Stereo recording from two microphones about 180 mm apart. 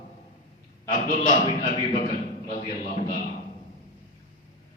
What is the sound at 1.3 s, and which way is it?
Speech, 45° left (ahead or behind).